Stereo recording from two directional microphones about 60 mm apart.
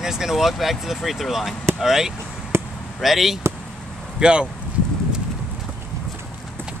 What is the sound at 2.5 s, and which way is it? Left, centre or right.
Basketball bounce, right.